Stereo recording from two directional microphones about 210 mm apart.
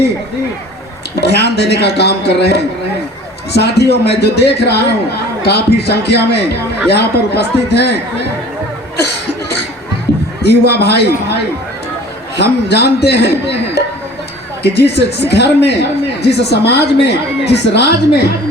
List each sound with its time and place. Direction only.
1.2 s speech: 50° left (ahead or behind)
10.4 s speech: 50° left (ahead or behind)